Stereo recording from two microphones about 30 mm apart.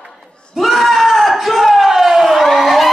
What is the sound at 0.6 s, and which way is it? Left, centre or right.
Crowd, centre.